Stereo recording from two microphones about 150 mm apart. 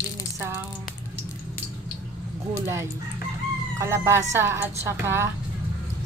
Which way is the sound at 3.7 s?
20° right (ahead or behind).